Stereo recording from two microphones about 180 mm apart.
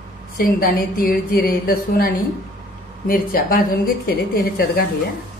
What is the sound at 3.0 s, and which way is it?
A woman's voice, 55° left (ahead or behind).